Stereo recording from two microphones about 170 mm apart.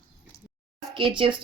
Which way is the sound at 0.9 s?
30° right (ahead or behind).